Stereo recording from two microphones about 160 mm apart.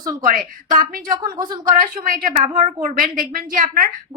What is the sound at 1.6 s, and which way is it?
A woman's voice, 60° right (ahead or behind).